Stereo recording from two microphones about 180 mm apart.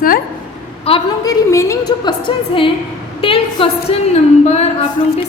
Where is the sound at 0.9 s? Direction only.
30° left (ahead or behind).